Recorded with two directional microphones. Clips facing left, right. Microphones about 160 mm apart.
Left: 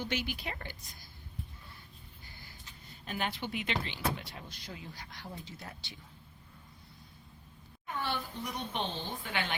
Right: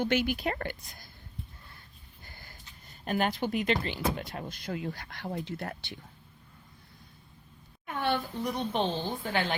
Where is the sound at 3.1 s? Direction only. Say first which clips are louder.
Right 8 dB; 45° right (ahead or behind).